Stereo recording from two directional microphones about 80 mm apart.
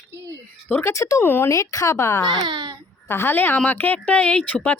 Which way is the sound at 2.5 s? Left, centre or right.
Right.